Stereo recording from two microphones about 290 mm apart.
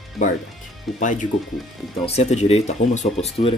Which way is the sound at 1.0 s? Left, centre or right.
Left.